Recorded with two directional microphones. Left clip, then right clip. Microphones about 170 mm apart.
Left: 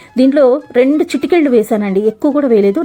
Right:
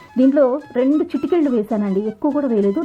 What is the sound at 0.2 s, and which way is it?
A woman's voice, 20° left (ahead or behind).